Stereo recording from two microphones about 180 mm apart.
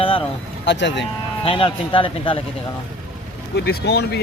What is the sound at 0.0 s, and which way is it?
Vehicle, 30° left (ahead or behind).